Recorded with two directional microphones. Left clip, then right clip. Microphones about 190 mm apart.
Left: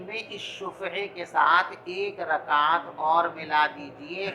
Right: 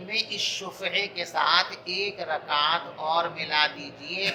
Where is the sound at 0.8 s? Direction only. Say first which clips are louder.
Right 4 dB; 5° right (ahead or behind).